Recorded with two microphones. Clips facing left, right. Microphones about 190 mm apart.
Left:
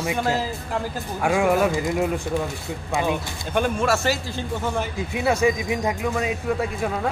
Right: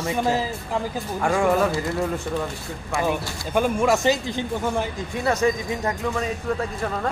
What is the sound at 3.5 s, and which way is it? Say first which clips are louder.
Speech: right 2 dB; 10° right (ahead or behind).